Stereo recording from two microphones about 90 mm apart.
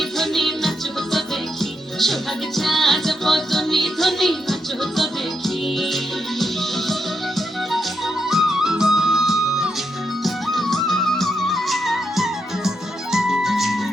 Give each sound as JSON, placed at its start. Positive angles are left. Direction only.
{"t": 0.2, "sound": "music", "side_deg": 0}
{"t": 2.6, "sound": "music", "side_deg": 0}
{"t": 7.3, "sound": "music", "side_deg": 0}